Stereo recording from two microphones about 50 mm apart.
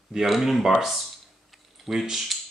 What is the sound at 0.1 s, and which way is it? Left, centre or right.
Speech, centre.